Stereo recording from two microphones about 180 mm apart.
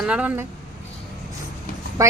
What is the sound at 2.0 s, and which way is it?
Speech, 20° right (ahead or behind).